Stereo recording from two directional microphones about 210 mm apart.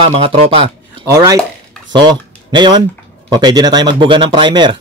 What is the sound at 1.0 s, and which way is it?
Speech, 15° right (ahead or behind).